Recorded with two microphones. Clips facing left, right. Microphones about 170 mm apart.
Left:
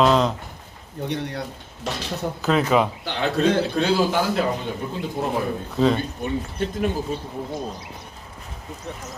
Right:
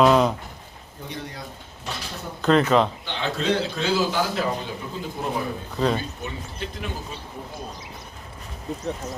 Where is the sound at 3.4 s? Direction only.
55° left (ahead or behind).